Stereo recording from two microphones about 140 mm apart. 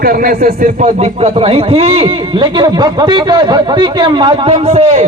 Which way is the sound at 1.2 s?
45° right (ahead or behind).